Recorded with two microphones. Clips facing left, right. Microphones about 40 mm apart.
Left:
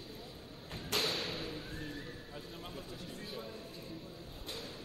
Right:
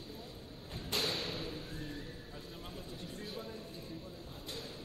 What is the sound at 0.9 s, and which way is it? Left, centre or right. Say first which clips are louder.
Thump: left 1 dB; left.